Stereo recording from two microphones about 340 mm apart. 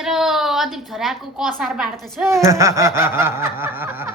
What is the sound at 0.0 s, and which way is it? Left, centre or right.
A woman's voice, centre.